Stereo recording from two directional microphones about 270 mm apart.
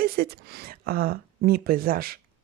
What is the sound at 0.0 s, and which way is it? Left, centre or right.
A woman's voice, right.